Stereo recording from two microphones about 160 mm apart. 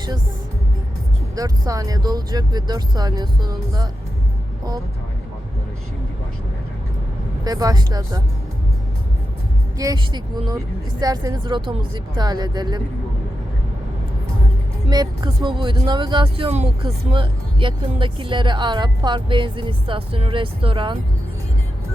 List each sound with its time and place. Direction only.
1.4 s speech: 20° right (ahead or behind)
7.4 s speech: 25° right (ahead or behind)
9.7 s speech: 25° right (ahead or behind)
14.8 s speech: 30° right (ahead or behind)